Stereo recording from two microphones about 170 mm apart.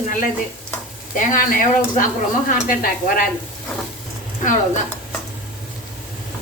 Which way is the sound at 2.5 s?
55° left (ahead or behind).